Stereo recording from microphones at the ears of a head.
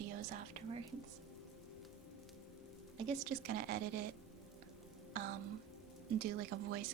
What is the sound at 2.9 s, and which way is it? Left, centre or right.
Speech, right.